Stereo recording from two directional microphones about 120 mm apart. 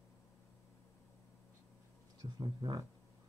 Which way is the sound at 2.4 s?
35° right (ahead or behind).